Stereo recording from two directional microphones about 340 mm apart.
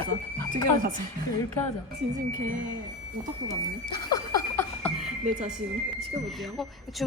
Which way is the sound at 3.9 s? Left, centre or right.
Centre.